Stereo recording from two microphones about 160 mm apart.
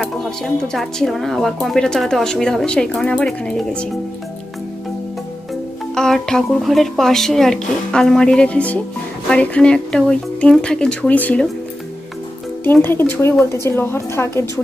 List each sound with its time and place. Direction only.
0.0 s speech: centre (ahead or behind)
5.9 s speech: 5° left (ahead or behind)
12.6 s speech: 15° left (ahead or behind)